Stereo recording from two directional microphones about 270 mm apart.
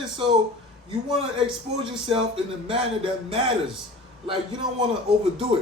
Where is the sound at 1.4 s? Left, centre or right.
Centre.